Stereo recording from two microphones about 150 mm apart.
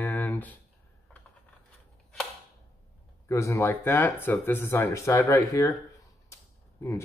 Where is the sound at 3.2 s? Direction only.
20° left (ahead or behind).